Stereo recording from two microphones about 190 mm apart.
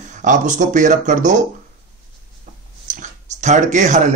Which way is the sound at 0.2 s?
40° right (ahead or behind).